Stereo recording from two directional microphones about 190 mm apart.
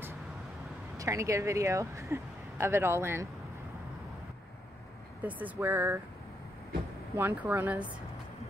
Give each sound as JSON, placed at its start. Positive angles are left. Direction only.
{"t": 0.9, "sound": "speech", "side_deg": -15}
{"t": 5.2, "sound": "speech", "side_deg": -10}
{"t": 7.2, "sound": "speech", "side_deg": -10}